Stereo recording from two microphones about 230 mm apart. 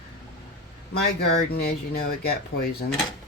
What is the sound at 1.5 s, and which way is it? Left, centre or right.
Speech, left.